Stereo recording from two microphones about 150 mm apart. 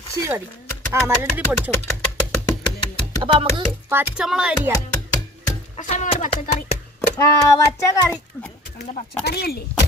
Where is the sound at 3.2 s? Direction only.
35° right (ahead or behind).